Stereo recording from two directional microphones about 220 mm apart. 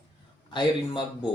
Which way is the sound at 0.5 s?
20° left (ahead or behind).